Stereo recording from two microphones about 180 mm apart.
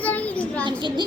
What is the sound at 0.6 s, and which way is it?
Speech, 25° right (ahead or behind).